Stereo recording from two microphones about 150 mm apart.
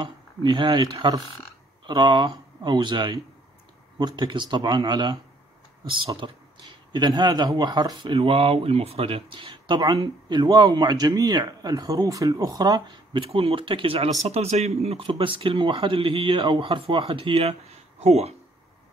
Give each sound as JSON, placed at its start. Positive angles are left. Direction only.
{"t": 0.0, "sound": "speech", "side_deg": -30}